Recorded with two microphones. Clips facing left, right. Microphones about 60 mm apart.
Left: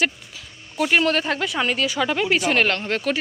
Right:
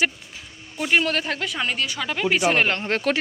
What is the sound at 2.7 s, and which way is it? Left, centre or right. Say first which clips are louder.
Speech: even; right.